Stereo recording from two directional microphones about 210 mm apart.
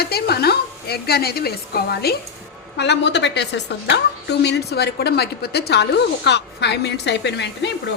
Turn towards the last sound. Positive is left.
turn(degrees=55)  # may be behind; listen again after turning